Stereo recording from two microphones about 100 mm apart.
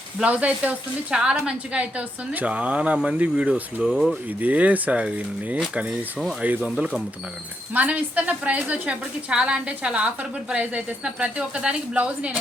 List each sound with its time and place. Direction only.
0.2 s speech: 10° right (ahead or behind)
4.3 s speech: 15° right (ahead or behind)